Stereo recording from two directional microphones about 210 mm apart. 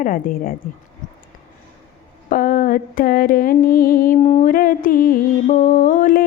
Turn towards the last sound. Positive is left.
turn(degrees=40)  # may be behind; listen again after turning